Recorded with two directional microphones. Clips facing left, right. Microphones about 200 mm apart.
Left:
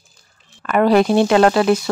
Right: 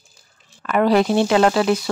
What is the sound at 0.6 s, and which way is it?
Speech, 55° left (ahead or behind).